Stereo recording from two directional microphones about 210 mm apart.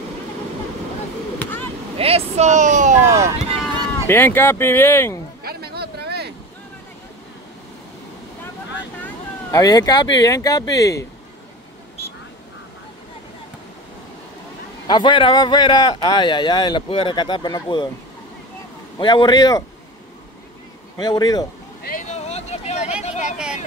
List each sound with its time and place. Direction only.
2.0 s speech: 30° right (ahead or behind)
3.3 s run: 25° right (ahead or behind)
4.1 s speech: 10° left (ahead or behind)
5.4 s a sound: 50° right (ahead or behind)
9.0 s speech: 15° left (ahead or behind)
14.9 s speech: 25° left (ahead or behind)
18.9 s speech: 20° left (ahead or behind)
21.0 s speech: 20° left (ahead or behind)
21.8 s vehicle: 35° left (ahead or behind)
23.0 s speech: 35° left (ahead or behind)